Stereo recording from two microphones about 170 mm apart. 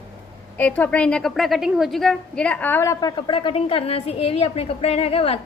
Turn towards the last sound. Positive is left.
turn(degrees=35)  # may be behind; listen again after turning